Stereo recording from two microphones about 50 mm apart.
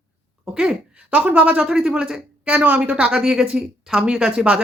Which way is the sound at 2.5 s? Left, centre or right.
Right.